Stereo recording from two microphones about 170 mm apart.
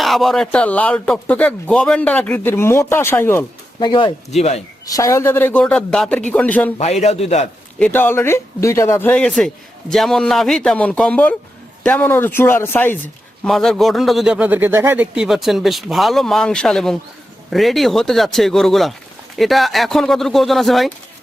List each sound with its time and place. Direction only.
0.0 s speech: centre (ahead or behind)
3.8 s speech: 25° left (ahead or behind)
4.3 s a man's voice: 40° left (ahead or behind)
4.9 s speech: 20° left (ahead or behind)
7.0 s a man's voice: 40° left (ahead or behind)
7.8 s a man's voice: 10° left (ahead or behind)